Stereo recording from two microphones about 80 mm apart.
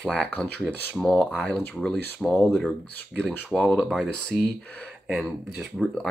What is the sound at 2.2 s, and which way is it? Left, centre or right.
Speech, centre.